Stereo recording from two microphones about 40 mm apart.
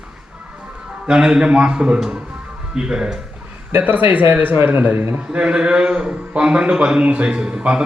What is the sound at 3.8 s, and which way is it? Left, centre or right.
Speech, right.